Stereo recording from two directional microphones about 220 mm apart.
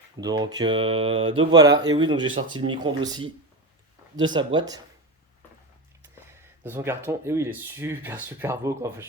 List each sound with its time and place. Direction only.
0.2 s speech: 20° right (ahead or behind)
6.6 s speech: 10° right (ahead or behind)